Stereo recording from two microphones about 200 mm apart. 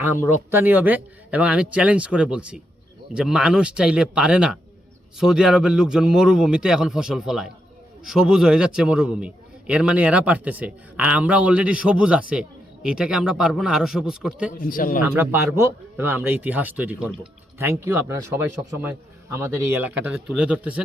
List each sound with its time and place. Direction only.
0.0 s a man's voice: 10° right (ahead or behind)
14.6 s a man's voice: 45° left (ahead or behind)
15.1 s a man's voice: 10° right (ahead or behind)